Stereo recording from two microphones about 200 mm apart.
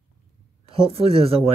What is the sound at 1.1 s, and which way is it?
Speech, 30° right (ahead or behind).